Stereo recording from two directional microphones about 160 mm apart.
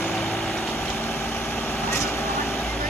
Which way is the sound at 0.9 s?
15° left (ahead or behind).